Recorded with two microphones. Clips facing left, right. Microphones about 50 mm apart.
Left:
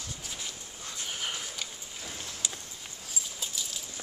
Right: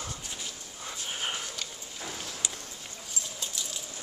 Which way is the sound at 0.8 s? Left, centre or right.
Centre.